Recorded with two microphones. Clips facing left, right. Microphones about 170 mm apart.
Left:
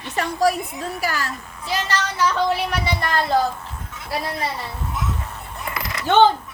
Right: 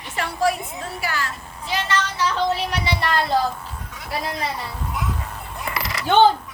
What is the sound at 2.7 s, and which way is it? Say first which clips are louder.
Speech: even; 45° left (ahead or behind).